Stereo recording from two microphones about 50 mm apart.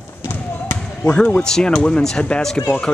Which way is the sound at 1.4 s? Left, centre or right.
Centre.